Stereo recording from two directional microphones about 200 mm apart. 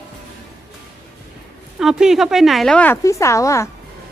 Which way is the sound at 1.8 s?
Centre (ahead or behind).